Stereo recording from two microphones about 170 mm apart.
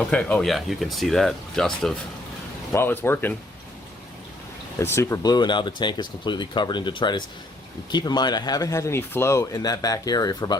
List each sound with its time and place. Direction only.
0.1 s speech: 5° left (ahead or behind)
4.8 s speech: 15° left (ahead or behind)